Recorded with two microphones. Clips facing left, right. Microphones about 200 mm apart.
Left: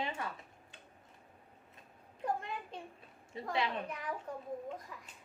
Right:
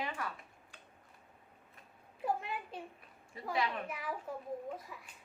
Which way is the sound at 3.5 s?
25° left (ahead or behind).